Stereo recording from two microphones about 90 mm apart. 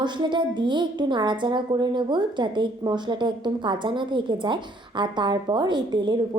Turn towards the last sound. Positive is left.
turn(degrees=-55)  # may be behind; listen again after turning